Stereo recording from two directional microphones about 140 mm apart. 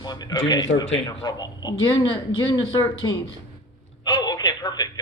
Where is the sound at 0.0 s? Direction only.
30° left (ahead or behind).